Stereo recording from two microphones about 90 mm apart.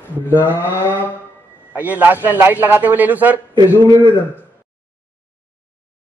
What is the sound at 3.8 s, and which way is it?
Speech, 55° right (ahead or behind).